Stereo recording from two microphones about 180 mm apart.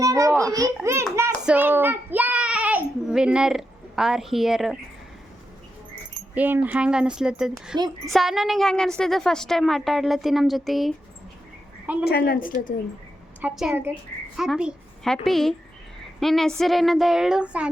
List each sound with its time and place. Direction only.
0.0 s children playing: 20° right (ahead or behind)
0.4 s a child's voice: 20° right (ahead or behind)
1.1 s child singing: 15° right (ahead or behind)
6.3 s a woman's voice: 10° right (ahead or behind)
12.0 s a woman's voice: 60° left (ahead or behind)
13.4 s a woman's voice: 5° right (ahead or behind)